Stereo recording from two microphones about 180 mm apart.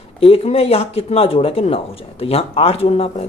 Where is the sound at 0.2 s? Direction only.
35° left (ahead or behind).